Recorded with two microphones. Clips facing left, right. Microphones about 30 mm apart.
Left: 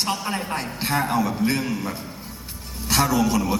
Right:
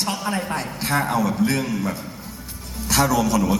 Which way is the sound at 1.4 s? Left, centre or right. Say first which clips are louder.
Right 3 dB; centre.